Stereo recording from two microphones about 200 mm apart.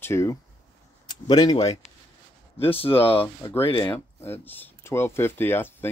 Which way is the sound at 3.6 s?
25° left (ahead or behind).